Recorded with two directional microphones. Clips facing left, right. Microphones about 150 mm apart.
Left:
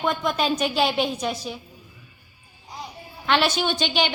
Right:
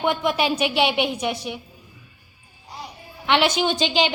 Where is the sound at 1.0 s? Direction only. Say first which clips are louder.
Right 1 dB; 15° right (ahead or behind).